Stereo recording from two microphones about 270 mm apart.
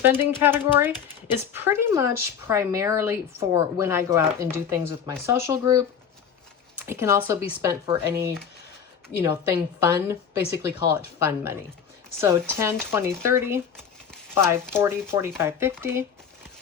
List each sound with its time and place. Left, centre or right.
0.0 s speech: centre
6.8 s speech: centre
12.9 s speech: centre